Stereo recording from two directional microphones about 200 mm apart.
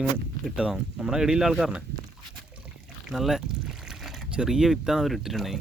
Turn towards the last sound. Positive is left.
turn(degrees=0)  # may be behind; listen again after turning